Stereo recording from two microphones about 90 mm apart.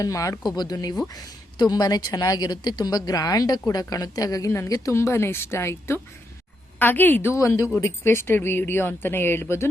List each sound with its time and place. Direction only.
0.0 s a woman's voice: 40° left (ahead or behind)
0.5 s a woman's voice: 50° left (ahead or behind); by 9.6 s 30° left (ahead or behind)